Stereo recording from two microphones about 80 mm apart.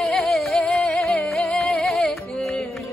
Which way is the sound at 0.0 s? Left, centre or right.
Centre.